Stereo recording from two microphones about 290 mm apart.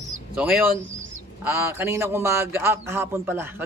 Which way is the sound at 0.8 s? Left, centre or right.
Right.